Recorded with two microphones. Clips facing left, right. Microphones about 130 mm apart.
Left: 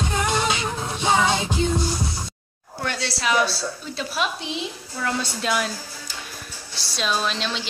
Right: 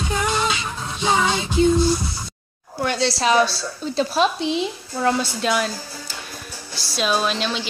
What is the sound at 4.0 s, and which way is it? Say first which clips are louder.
Speech: right 8 dB; 30° right (ahead or behind).